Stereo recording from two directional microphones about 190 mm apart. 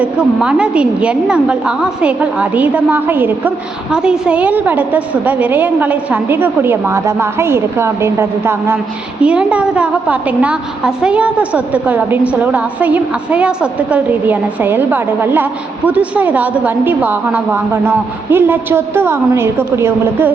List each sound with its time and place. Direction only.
0.0 s a woman's voice: 5° right (ahead or behind)